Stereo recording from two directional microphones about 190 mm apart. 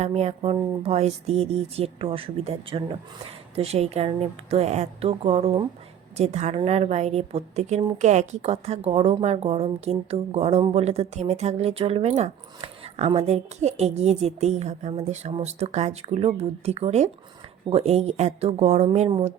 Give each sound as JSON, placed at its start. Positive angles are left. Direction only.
{"t": 0.0, "sound": "a woman's voice", "side_deg": -35}